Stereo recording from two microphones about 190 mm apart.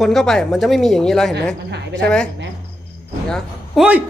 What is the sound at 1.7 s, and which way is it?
Speech, 65° right (ahead or behind).